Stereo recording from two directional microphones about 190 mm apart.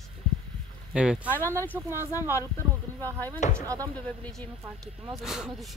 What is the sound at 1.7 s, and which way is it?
Speech, 10° right (ahead or behind).